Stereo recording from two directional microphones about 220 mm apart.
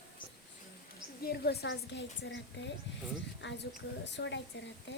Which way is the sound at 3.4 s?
55° left (ahead or behind).